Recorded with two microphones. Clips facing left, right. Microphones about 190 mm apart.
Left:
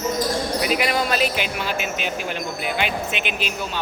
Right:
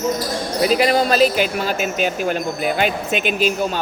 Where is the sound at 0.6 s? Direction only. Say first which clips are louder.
Right 9 dB; 35° right (ahead or behind).